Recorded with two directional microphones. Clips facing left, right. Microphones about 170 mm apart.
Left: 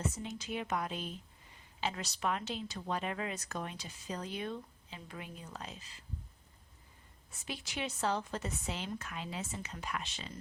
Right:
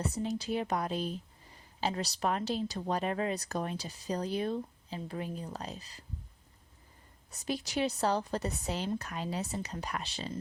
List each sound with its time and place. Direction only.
0.0 s speech: 35° right (ahead or behind)
7.3 s speech: 40° right (ahead or behind)